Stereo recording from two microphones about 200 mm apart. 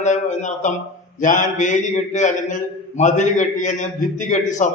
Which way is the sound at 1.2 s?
40° left (ahead or behind).